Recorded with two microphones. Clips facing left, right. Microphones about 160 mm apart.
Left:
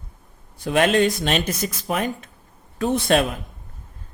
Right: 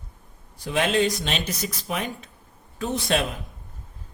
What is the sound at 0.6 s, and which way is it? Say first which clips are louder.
Speech: left 4 dB; 60° left (ahead or behind).